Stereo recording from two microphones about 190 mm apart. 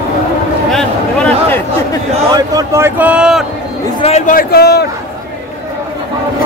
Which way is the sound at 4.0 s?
35° left (ahead or behind).